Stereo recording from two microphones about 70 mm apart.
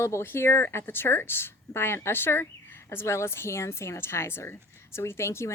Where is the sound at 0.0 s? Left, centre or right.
Left.